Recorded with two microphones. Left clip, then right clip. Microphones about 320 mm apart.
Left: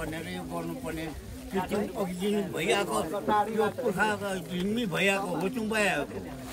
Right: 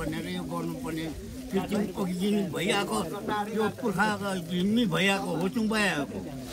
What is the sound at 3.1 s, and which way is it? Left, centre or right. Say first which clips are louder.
Speech: left 4 dB; right.